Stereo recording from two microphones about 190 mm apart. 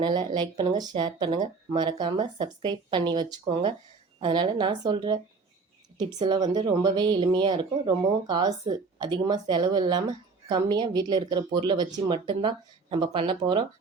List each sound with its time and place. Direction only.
0.0 s a woman's voice: 25° right (ahead or behind)